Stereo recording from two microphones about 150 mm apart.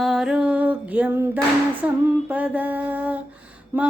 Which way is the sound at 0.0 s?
5° right (ahead or behind).